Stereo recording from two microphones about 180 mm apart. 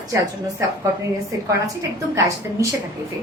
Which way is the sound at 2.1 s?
15° right (ahead or behind).